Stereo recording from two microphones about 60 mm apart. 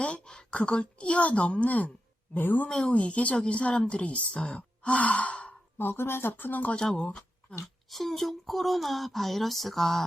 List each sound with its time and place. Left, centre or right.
0.0 s a woman's voice: centre; by 2.6 s left
2.6 s speech: centre
5.7 s speech: left
6.7 s speech: centre
7.9 s speech: centre